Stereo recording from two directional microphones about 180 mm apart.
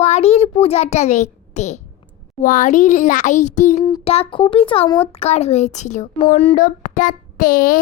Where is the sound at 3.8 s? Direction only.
30° left (ahead or behind).